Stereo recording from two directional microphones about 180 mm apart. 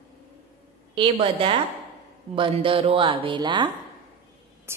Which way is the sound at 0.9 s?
30° right (ahead or behind).